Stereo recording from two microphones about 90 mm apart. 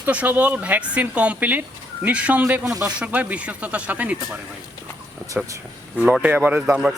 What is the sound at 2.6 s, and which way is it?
Speech, 35° right (ahead or behind).